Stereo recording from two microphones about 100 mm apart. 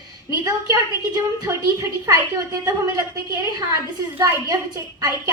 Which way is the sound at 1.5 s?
35° right (ahead or behind).